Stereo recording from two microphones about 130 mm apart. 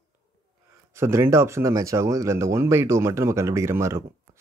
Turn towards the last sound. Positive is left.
turn(degrees=-20)  # may be behind; listen again after turning